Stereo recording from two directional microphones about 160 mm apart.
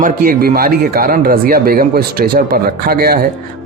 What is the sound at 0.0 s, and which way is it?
Speech, 65° right (ahead or behind).